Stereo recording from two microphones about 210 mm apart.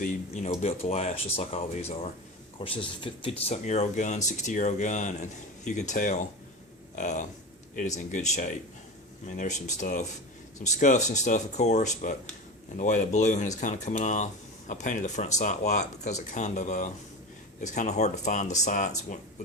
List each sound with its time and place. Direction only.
0.0 s speech: 30° left (ahead or behind)